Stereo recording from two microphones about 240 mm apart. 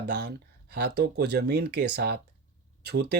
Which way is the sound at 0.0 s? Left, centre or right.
Right.